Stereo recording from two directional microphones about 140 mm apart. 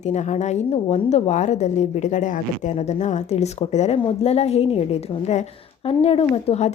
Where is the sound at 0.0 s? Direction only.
55° left (ahead or behind).